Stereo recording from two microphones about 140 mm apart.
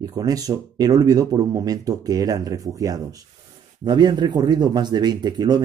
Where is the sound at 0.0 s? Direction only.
25° right (ahead or behind).